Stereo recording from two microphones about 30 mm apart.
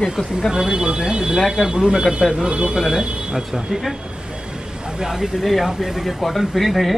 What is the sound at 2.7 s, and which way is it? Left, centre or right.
Speech, centre.